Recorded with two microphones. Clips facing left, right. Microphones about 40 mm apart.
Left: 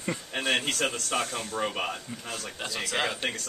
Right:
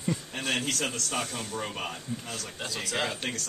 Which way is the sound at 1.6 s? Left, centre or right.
Left.